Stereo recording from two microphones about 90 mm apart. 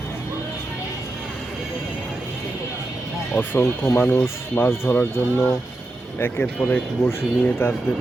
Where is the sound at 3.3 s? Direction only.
20° left (ahead or behind).